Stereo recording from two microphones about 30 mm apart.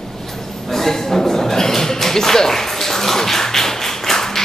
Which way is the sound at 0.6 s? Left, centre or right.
Centre.